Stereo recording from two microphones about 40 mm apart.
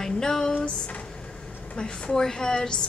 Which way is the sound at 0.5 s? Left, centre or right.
Left.